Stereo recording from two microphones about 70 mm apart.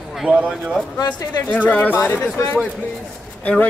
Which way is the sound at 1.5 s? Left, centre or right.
Left.